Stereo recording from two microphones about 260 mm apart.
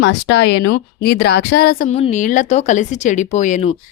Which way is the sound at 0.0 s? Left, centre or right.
Left.